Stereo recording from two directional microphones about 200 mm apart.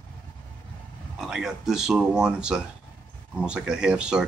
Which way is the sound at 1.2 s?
Centre (ahead or behind).